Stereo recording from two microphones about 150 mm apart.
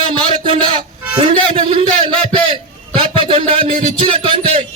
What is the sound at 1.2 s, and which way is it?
A man's voice, 35° right (ahead or behind).